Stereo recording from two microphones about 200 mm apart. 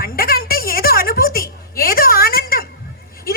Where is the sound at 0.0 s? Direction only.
50° left (ahead or behind).